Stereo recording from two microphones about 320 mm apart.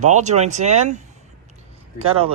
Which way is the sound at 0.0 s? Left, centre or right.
Right.